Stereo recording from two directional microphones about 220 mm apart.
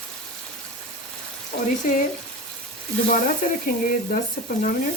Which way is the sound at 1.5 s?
45° left (ahead or behind).